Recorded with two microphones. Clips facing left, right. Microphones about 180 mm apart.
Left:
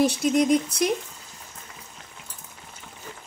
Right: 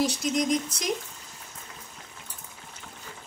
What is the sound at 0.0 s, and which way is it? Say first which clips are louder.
Speech: left 5 dB; 55° left (ahead or behind).